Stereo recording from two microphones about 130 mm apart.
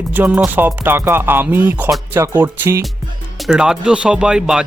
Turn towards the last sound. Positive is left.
turn(degrees=-5)  # may be behind; listen again after turning